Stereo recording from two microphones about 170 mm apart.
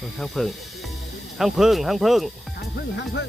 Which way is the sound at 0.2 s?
Centre (ahead or behind).